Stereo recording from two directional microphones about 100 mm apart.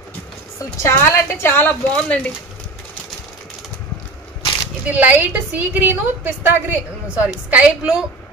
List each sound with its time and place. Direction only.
0.8 s a woman's voice: 25° left (ahead or behind)
4.9 s a woman's voice: 15° right (ahead or behind)